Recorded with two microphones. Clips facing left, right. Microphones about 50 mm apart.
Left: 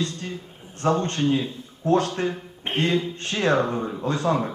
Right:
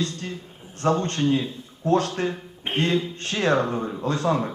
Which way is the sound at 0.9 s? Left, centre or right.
Centre.